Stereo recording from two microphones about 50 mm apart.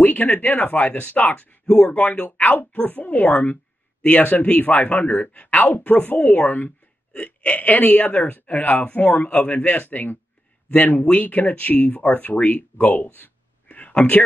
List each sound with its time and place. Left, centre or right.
0.0 s speech: left